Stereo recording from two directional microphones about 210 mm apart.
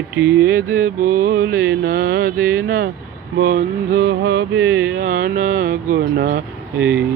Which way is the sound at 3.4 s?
45° right (ahead or behind).